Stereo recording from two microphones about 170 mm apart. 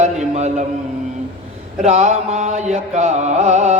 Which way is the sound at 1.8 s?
35° right (ahead or behind).